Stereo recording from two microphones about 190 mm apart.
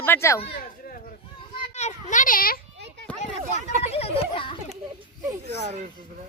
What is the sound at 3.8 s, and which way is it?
Children playing, 30° left (ahead or behind).